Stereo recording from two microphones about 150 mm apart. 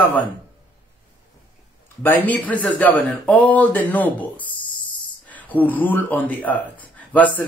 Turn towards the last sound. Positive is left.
turn(degrees=10)  # may be behind; listen again after turning